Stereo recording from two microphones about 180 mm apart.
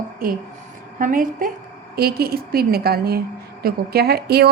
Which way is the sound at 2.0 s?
60° right (ahead or behind).